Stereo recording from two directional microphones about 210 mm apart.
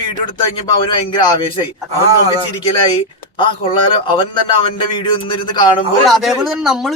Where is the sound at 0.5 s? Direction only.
20° left (ahead or behind).